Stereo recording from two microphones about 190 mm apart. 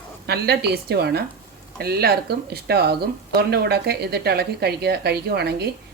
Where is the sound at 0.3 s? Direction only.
60° right (ahead or behind).